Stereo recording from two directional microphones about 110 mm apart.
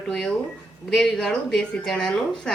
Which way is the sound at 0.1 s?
5° left (ahead or behind).